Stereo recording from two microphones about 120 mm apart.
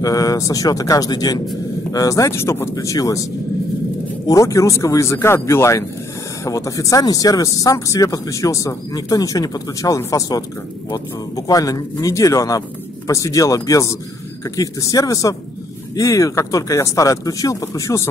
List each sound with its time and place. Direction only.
0.0 s speech: 30° left (ahead or behind)
4.3 s speech: 25° left (ahead or behind)